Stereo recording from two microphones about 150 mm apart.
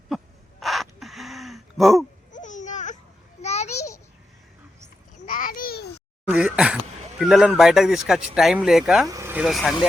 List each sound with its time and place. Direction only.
0.6 s gasp: centre (ahead or behind)
2.3 s babbling: 55° left (ahead or behind)
3.4 s a sound: 50° left (ahead or behind)
5.2 s babbling: 60° left (ahead or behind); by 5.9 s 85° left
6.2 s a sound: 5° right (ahead or behind)
7.2 s speech: 5° right (ahead or behind)
9.0 s speech: 20° right (ahead or behind)
9.4 s speech: centre (ahead or behind)